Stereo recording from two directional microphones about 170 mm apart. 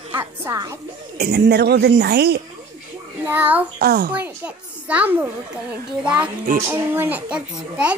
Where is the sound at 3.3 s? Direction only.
10° right (ahead or behind).